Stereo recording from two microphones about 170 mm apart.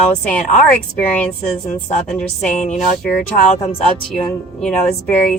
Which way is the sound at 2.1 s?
5° left (ahead or behind).